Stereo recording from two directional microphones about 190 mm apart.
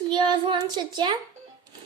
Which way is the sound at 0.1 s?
25° right (ahead or behind).